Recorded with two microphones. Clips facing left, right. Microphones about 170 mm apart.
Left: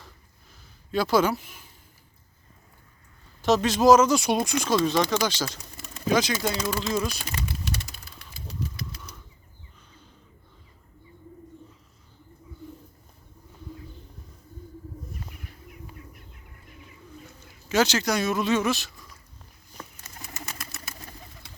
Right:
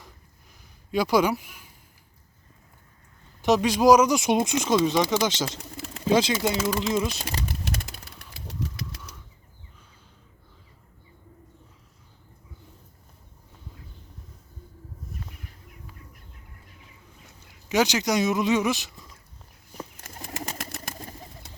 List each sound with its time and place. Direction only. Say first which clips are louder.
0.9 s speech: right 1 dB; 15° right (ahead or behind)
3.4 s speech: even; 15° right (ahead or behind)
6.3 s a sound: right 2 dB; 20° right (ahead or behind)
7.6 s a sound: right 1 dB; 60° right (ahead or behind); by 9.1 s 80° right
17.7 s speech: even; 15° right (ahead or behind)
20.9 s pigeon: right 4 dB; 25° right (ahead or behind)